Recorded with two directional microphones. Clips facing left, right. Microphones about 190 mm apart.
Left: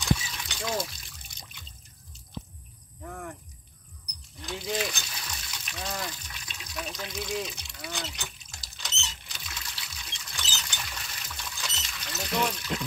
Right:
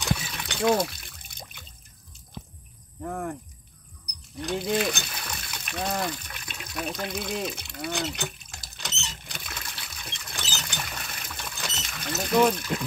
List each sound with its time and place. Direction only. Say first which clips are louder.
0.0 s water: left 1 dB; 60° right (ahead or behind)
3.0 s speech: right 8 dB; 50° right (ahead or behind)
4.4 s water: right 6 dB; 60° right (ahead or behind)